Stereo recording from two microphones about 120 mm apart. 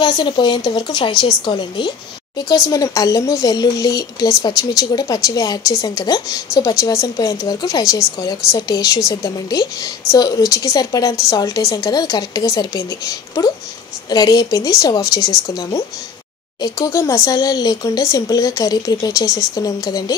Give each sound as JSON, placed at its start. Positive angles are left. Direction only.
{"t": 0.0, "sound": "speech", "side_deg": 35}
{"t": 16.6, "sound": "speech", "side_deg": 30}